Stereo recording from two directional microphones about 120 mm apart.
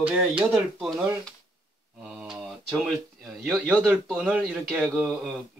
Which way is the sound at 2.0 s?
5° right (ahead or behind).